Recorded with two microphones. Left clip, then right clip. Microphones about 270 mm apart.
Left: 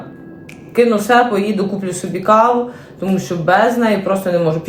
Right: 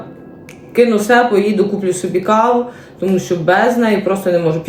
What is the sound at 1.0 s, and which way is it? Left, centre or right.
Speech, centre.